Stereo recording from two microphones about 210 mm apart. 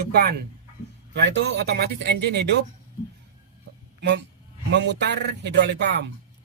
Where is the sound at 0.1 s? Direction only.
50° right (ahead or behind).